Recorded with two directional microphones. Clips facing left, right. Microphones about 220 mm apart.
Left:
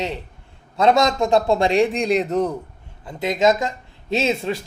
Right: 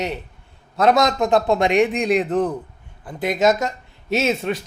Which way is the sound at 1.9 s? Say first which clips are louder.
Right 1 dB; centre (ahead or behind).